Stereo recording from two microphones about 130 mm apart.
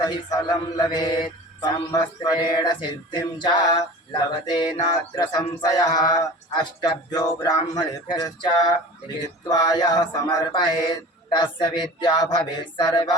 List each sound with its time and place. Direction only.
0.0 s mantra: 30° left (ahead or behind)